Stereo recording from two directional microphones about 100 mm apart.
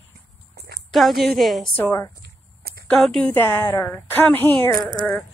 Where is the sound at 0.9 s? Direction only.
Centre (ahead or behind).